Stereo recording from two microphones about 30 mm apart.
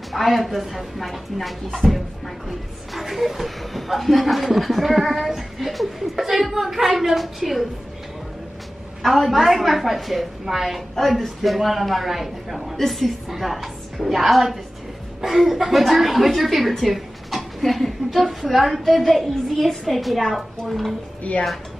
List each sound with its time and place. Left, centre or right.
0.1 s a woman's voice: centre
9.0 s a woman's voice: centre
11.0 s a woman's voice: centre
16.8 s a sound: centre
18.2 s speech: centre
21.2 s speech: left